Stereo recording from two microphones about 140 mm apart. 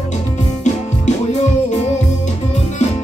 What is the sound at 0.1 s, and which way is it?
Music, 55° left (ahead or behind).